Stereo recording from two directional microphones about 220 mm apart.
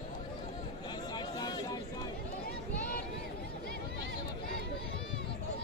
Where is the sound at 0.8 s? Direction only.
20° left (ahead or behind).